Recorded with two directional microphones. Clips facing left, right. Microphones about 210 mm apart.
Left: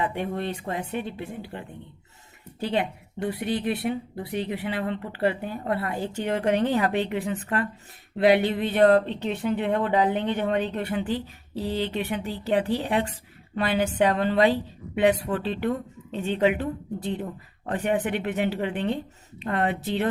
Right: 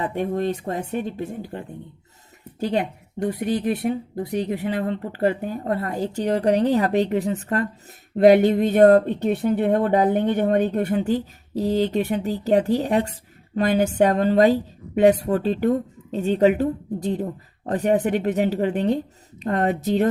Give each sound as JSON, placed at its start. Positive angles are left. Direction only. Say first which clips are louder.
{"t": 0.0, "sound": "a woman's voice", "louder": "right 5 dB", "side_deg": -40}